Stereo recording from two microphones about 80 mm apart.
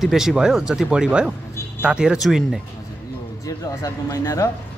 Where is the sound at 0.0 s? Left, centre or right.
Centre.